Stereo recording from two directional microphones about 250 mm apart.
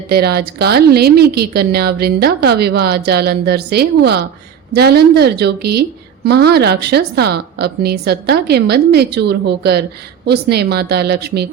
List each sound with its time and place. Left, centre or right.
0.1 s a woman's voice: right